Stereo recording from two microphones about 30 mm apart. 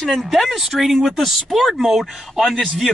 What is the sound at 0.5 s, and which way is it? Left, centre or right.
Speech, centre.